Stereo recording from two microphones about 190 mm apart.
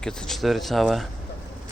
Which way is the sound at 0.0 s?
5° left (ahead or behind).